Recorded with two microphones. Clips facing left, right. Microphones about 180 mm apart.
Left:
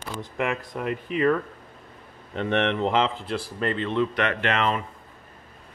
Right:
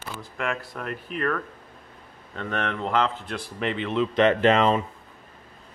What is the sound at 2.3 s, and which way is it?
Speech, 25° left (ahead or behind).